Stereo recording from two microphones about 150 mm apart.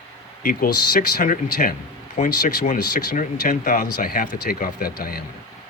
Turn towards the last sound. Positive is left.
turn(degrees=85)